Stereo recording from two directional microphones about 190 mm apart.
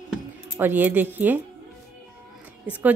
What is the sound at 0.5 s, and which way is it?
Speech, 10° right (ahead or behind).